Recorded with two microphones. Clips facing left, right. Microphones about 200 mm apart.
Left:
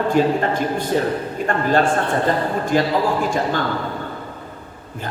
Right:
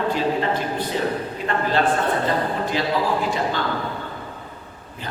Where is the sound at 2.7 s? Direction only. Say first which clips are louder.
Left 9 dB; 50° left (ahead or behind).